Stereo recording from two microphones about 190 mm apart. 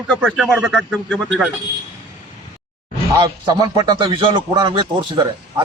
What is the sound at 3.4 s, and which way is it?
A man's voice, 20° right (ahead or behind).